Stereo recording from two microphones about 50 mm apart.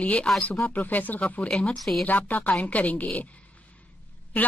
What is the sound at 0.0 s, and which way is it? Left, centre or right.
Speech, left.